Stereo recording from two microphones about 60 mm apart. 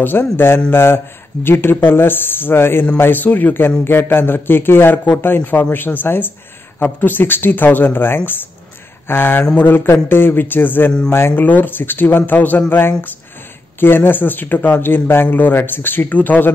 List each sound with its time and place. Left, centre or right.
0.0 s speech: left
11.1 s speech: left
11.4 s speech: left